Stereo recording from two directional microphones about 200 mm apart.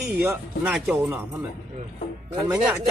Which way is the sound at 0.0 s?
10° right (ahead or behind).